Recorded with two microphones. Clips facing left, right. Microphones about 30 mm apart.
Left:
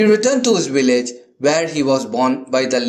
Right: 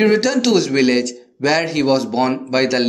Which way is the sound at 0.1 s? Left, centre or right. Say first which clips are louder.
Left 1 dB; right.